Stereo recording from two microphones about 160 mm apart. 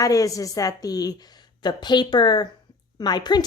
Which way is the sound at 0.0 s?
20° left (ahead or behind).